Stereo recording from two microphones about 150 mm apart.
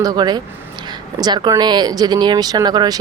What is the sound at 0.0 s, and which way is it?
Speech, 25° right (ahead or behind).